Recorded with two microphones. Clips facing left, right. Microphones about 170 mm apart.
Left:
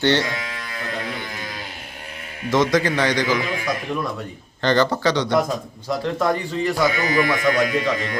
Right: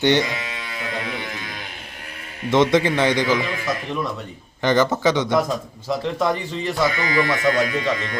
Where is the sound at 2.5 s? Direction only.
25° right (ahead or behind).